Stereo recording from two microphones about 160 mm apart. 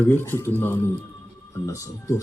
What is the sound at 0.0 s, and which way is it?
Speech, 15° left (ahead or behind).